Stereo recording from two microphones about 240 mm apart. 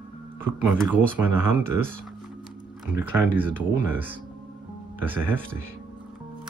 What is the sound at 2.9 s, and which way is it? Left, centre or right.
Speech, centre.